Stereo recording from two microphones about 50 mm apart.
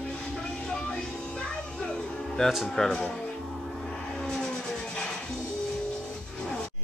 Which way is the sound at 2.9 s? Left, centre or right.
Centre.